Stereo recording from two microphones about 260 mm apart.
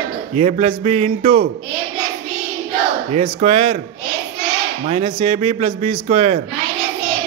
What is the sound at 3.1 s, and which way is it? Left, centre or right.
Speech, right.